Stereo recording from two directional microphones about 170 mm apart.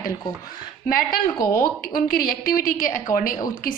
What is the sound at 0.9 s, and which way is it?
A woman's voice, 55° left (ahead or behind).